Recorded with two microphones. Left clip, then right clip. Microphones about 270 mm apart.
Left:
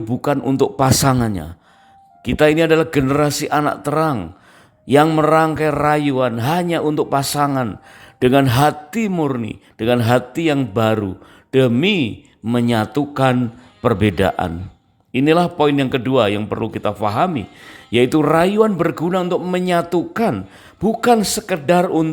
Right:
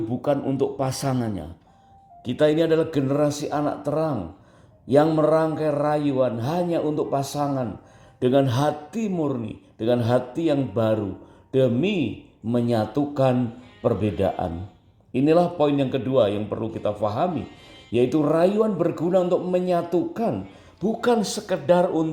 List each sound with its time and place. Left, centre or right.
0.1 s speech: left
2.2 s a man's voice: left